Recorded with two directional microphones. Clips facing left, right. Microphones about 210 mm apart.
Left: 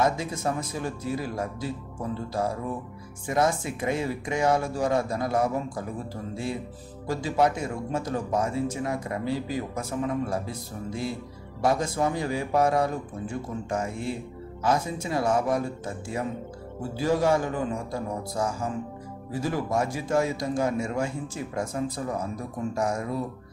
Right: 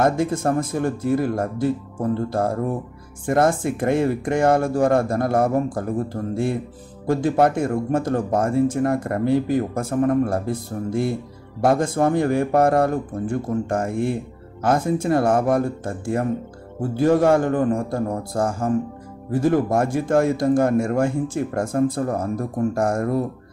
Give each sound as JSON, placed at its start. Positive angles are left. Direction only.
{"t": 0.0, "sound": "speech", "side_deg": -55}